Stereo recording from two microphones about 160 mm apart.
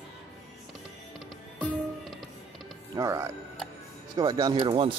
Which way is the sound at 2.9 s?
20° right (ahead or behind).